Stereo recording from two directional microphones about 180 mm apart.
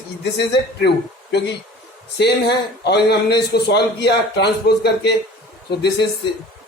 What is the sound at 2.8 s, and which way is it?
A man's voice, 65° left (ahead or behind).